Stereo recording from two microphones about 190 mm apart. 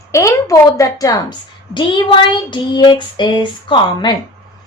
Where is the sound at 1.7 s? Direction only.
25° left (ahead or behind).